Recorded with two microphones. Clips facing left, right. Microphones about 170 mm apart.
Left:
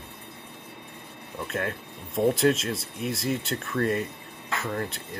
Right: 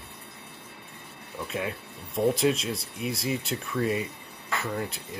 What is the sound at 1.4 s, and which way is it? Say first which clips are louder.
Speech: left 1 dB; centre (ahead or behind).